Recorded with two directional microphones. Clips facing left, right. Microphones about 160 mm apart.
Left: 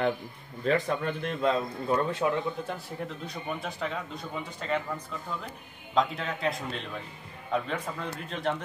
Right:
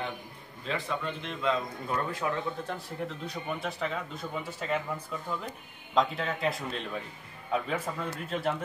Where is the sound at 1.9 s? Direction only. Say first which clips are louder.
Left 5 dB; 25° left (ahead or behind).